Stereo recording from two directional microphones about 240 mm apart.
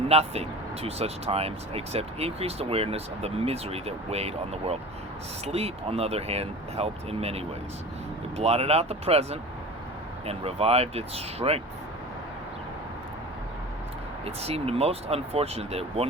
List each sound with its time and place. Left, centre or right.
0.1 s speech: right
14.3 s speech: right